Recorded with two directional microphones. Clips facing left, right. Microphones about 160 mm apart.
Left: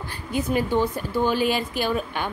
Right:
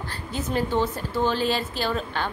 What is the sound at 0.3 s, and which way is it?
A woman's voice, 10° left (ahead or behind).